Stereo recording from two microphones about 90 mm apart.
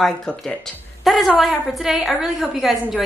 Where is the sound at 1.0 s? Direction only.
Centre (ahead or behind).